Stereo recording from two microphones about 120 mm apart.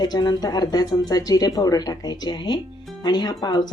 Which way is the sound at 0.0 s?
35° left (ahead or behind).